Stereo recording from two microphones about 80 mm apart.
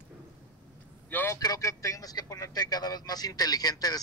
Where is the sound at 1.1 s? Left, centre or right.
Left.